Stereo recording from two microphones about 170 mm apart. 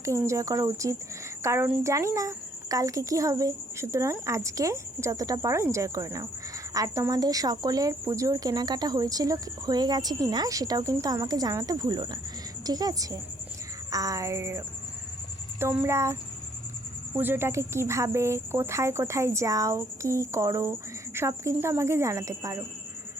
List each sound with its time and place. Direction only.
0.0 s speech: 20° right (ahead or behind)
15.6 s speech: 10° right (ahead or behind)
17.2 s speech: 10° right (ahead or behind)